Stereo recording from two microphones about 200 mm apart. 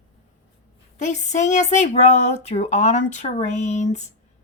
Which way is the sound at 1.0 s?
35° left (ahead or behind).